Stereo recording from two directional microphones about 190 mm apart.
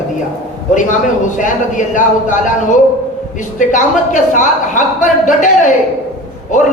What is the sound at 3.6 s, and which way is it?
A woman's voice, 40° left (ahead or behind).